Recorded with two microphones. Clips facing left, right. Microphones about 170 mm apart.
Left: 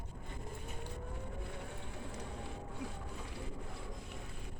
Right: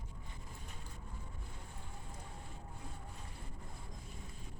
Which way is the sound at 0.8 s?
70° left (ahead or behind).